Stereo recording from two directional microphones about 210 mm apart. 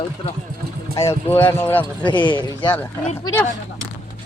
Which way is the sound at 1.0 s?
10° left (ahead or behind).